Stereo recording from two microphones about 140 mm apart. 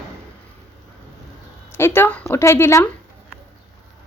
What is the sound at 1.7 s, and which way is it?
A woman's voice, 15° left (ahead or behind).